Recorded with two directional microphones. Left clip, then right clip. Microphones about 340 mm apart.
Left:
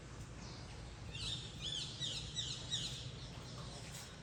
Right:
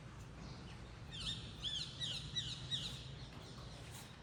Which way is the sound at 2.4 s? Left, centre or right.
Right.